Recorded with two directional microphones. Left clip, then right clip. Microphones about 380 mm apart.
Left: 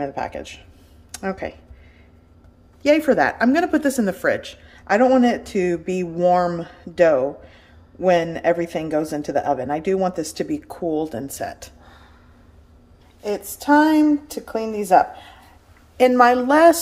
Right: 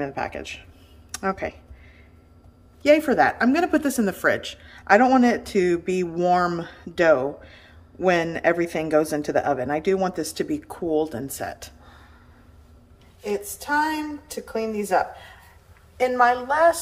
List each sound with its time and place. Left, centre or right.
0.0 s speech: centre
2.8 s speech: centre
13.2 s speech: centre